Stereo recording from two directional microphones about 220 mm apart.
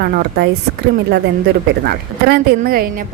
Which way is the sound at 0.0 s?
45° right (ahead or behind).